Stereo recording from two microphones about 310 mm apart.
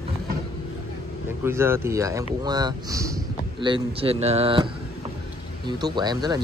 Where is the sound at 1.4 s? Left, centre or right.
Centre.